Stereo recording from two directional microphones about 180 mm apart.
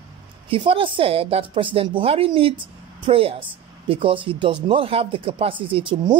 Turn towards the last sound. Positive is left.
turn(degrees=-25)  # may be behind; listen again after turning